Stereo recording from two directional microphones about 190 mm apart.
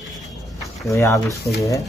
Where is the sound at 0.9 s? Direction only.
15° left (ahead or behind).